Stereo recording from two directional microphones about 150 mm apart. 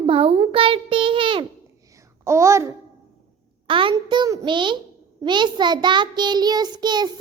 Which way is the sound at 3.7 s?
35° right (ahead or behind).